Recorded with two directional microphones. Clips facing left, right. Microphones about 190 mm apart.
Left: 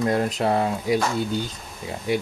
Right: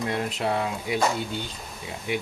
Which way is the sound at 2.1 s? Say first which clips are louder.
Left 5 dB; 35° left (ahead or behind).